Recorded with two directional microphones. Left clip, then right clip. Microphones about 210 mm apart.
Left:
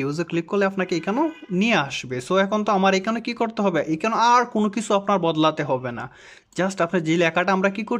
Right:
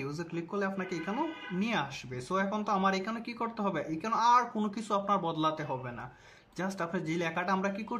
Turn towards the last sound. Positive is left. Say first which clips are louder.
# left 11 dB
turn(degrees=35)  # may be behind; listen again after turning